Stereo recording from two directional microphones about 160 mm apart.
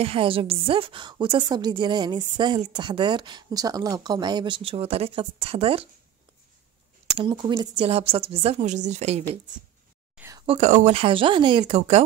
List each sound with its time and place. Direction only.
0.0 s a woman's voice: 35° right (ahead or behind)
7.2 s a woman's voice: 30° right (ahead or behind); by 9.2 s 45° right (ahead or behind)
10.3 s a woman's voice: 35° right (ahead or behind)